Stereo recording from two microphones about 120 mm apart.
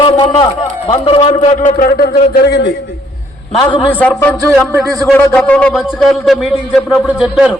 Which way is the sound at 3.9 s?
15° left (ahead or behind).